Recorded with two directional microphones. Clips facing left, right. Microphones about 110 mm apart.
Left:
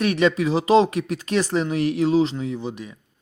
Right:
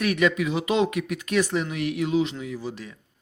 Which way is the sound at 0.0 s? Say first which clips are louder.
Left 3 dB; 30° left (ahead or behind).